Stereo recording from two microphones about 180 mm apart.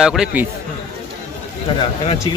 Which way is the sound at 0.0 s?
5° right (ahead or behind).